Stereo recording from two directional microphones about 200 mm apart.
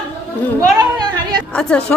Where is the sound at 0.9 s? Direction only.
20° right (ahead or behind).